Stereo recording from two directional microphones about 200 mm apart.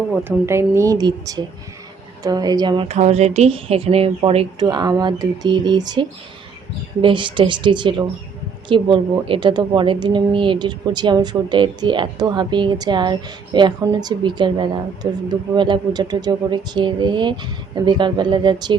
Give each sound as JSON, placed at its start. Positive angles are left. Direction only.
{"t": 0.1, "sound": "a woman's voice", "side_deg": -10}